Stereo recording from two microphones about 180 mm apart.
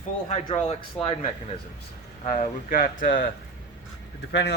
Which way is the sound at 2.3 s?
45° left (ahead or behind).